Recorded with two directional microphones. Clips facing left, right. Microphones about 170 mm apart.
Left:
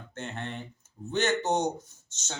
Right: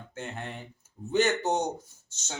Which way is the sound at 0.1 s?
10° right (ahead or behind).